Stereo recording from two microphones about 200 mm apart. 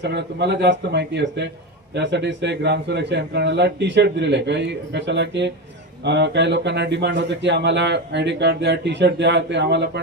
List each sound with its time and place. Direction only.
0.0 s speech: 60° right (ahead or behind)